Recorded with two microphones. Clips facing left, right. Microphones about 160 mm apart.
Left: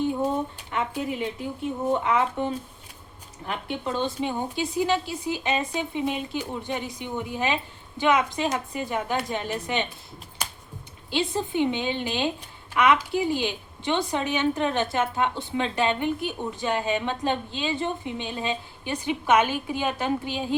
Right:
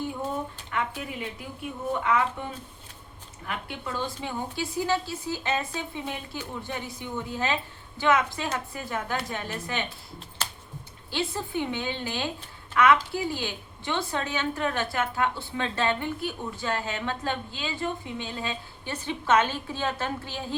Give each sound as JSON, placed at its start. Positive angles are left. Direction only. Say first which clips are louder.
{"t": 0.7, "sound": "a woman's voice", "louder": "left 3 dB", "side_deg": 20}
{"t": 11.1, "sound": "a woman's voice", "louder": "left 4 dB", "side_deg": 20}